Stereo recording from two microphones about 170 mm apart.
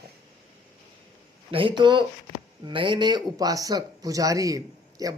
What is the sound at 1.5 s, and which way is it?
A man's voice, 30° right (ahead or behind).